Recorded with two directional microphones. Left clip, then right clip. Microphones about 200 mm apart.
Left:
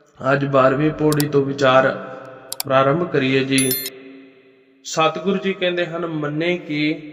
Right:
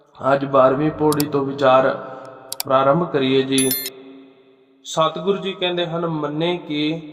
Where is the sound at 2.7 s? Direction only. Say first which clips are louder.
Even; 20° left (ahead or behind).